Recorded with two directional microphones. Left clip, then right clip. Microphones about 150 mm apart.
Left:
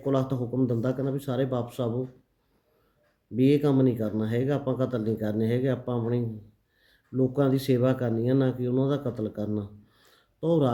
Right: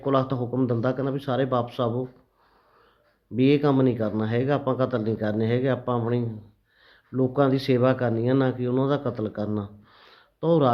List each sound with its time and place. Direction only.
0.0 s speech: 30° left (ahead or behind)
3.3 s speech: 25° left (ahead or behind)